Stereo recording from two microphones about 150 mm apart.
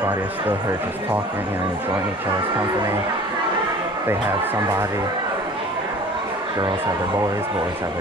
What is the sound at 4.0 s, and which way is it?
Speech, 15° right (ahead or behind).